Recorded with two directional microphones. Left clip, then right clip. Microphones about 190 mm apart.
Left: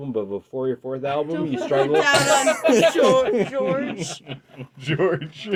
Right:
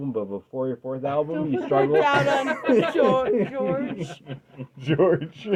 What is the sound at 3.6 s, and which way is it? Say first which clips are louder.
Speech: left 3 dB; 30° right (ahead or behind).